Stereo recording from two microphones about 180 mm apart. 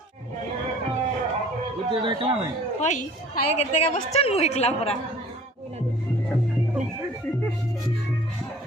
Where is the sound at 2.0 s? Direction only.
30° right (ahead or behind).